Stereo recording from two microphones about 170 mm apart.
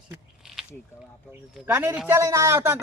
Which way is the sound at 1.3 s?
15° right (ahead or behind).